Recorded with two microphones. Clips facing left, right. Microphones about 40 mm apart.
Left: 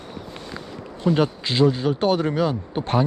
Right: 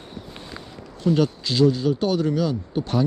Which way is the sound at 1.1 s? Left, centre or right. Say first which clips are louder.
Even; left.